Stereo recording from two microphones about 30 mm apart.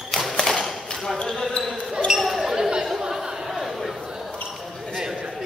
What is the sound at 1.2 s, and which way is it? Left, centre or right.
Speech, centre.